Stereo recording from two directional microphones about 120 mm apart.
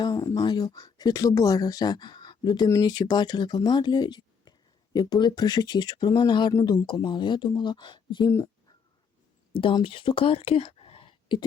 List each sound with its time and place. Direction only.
0.0 s speech: 35° left (ahead or behind)
6.5 s speech: 30° left (ahead or behind)
9.5 s speech: 45° left (ahead or behind)